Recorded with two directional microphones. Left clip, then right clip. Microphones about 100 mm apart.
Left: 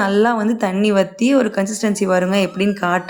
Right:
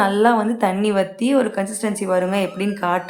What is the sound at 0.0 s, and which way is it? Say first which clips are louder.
A woman's voice: even; 30° left (ahead or behind).